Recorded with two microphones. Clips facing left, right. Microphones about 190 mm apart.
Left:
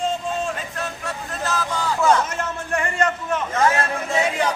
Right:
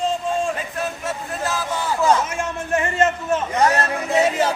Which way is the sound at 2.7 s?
20° right (ahead or behind).